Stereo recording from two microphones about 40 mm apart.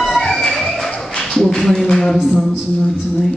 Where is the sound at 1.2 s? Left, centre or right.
Centre.